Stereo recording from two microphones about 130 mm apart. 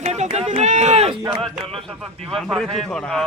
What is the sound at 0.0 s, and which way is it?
Run, 60° right (ahead or behind).